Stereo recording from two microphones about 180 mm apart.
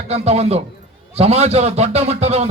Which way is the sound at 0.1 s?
35° right (ahead or behind).